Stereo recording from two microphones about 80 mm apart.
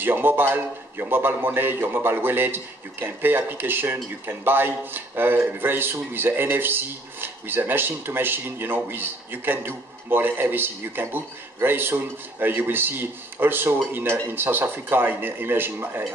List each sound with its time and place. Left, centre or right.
0.0 s a man's voice: right